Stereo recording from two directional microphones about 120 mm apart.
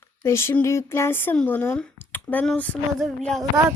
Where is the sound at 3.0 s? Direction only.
Centre (ahead or behind).